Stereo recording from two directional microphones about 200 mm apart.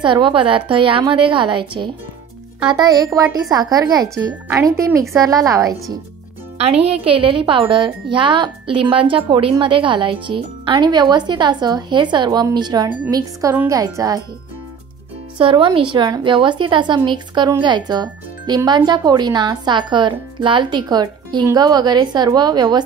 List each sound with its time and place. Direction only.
0.0 s a woman's voice: 25° right (ahead or behind)
6.6 s a woman's voice: 30° right (ahead or behind)
15.3 s speech: 25° right (ahead or behind)